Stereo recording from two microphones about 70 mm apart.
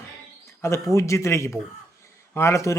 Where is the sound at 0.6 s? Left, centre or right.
Left.